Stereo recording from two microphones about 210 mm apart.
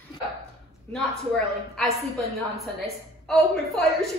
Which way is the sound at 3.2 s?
Centre (ahead or behind).